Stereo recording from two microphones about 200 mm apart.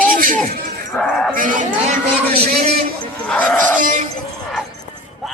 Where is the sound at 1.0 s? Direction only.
Centre (ahead or behind).